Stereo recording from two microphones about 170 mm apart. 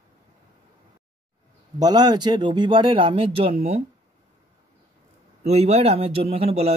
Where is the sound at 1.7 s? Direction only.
25° right (ahead or behind).